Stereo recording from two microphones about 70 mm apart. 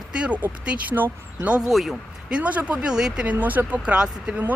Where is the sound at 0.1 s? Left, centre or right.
Centre.